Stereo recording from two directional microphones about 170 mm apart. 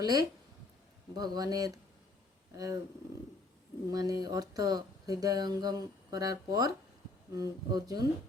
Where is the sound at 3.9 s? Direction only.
20° right (ahead or behind).